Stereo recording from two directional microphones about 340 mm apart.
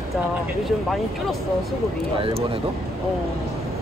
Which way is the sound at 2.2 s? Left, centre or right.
Centre.